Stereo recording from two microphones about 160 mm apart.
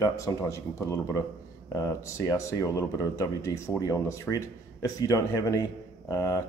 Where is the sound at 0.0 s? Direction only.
20° left (ahead or behind).